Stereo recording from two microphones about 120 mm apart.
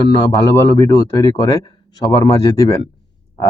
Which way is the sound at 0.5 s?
30° left (ahead or behind).